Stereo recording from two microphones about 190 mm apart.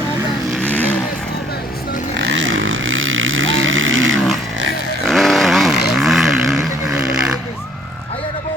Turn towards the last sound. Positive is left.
turn(degrees=-5)  # may be behind; listen again after turning